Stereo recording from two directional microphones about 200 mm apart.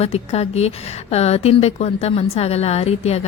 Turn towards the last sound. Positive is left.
turn(degrees=30)  # may be behind; listen again after turning